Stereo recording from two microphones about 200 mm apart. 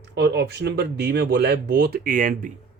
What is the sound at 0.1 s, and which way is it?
Speech, 55° right (ahead or behind).